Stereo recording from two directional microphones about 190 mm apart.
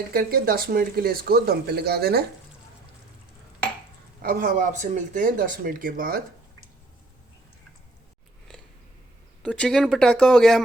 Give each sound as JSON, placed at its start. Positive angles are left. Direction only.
{"t": 0.1, "sound": "speech", "side_deg": -55}
{"t": 4.2, "sound": "speech", "side_deg": -45}
{"t": 9.4, "sound": "speech", "side_deg": 5}